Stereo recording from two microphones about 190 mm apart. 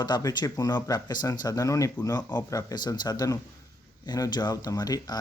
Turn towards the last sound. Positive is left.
turn(degrees=20)  # may be behind; listen again after turning